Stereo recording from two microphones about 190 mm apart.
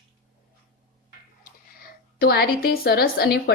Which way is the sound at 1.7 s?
55° left (ahead or behind).